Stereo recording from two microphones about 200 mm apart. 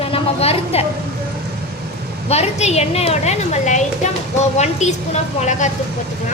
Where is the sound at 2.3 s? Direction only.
35° left (ahead or behind).